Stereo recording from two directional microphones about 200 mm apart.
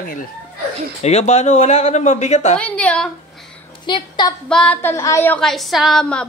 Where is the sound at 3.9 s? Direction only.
20° left (ahead or behind).